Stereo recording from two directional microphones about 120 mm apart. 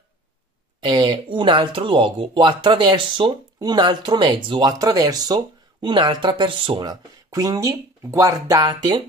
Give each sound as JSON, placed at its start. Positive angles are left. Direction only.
{"t": 0.8, "sound": "speech", "side_deg": -40}